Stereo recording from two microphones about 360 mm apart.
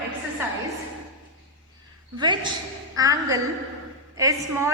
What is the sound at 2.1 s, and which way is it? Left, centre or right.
A woman's voice, centre.